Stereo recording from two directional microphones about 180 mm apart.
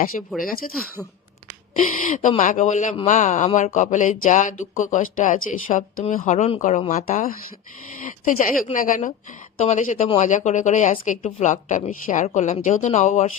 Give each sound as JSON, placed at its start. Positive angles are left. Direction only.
{"t": 0.3, "sound": "speech", "side_deg": 0}
{"t": 1.7, "sound": "speech", "side_deg": 45}